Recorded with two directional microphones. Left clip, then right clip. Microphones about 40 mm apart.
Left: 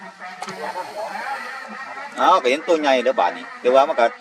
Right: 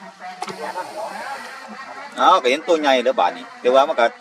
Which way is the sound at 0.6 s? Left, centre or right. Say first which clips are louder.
Even; centre.